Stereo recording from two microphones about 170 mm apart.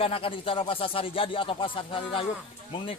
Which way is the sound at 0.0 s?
30° left (ahead or behind).